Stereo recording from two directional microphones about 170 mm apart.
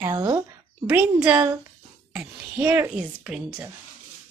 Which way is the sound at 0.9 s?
10° right (ahead or behind).